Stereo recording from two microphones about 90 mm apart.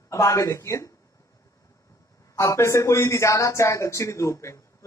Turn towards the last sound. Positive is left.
turn(degrees=35)  # may be behind; listen again after turning